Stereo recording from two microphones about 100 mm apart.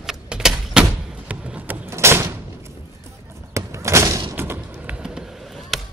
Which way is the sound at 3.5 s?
30° right (ahead or behind).